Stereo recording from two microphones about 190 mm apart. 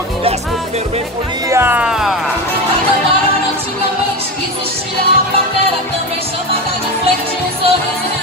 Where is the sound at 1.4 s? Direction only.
10° right (ahead or behind).